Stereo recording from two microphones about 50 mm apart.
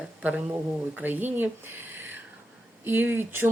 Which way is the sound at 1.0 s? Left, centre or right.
Right.